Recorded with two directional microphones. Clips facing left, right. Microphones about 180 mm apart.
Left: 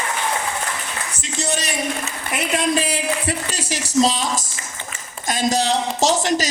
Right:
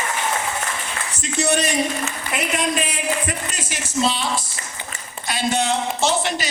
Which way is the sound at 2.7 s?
35° left (ahead or behind).